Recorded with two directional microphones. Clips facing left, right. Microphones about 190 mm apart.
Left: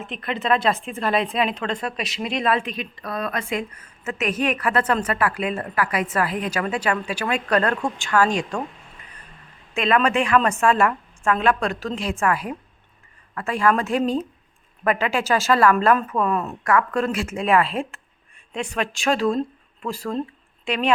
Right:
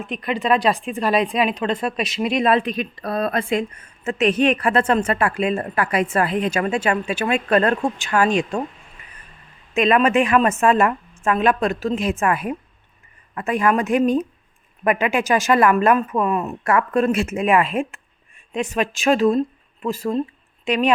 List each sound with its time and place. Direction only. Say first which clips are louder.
0.1 s a woman's voice: right 3 dB; 15° right (ahead or behind)
2.6 s a woman's voice: right 5 dB; 40° right (ahead or behind); by 8.6 s 20° right (ahead or behind)
9.7 s a woman's voice: right 4 dB; 20° right (ahead or behind)
16.6 s a woman's voice: right 3 dB; 25° right (ahead or behind)